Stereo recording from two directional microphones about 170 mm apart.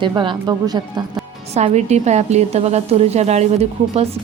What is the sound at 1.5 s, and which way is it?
A woman's voice, 40° right (ahead or behind).